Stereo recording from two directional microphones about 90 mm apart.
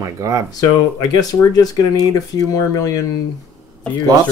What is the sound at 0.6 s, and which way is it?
Speech, 45° left (ahead or behind).